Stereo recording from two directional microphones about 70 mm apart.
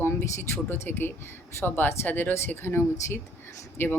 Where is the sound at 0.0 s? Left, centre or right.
Left.